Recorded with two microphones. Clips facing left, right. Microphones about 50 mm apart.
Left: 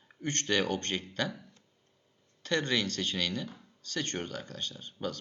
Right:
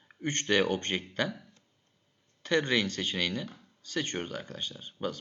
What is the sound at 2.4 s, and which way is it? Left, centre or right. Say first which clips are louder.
Speech: right 3 dB; centre.